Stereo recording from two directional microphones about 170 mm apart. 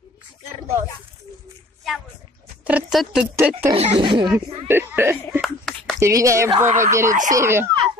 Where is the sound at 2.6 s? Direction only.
10° right (ahead or behind).